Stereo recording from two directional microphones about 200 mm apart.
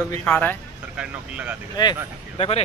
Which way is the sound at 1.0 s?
5° right (ahead or behind).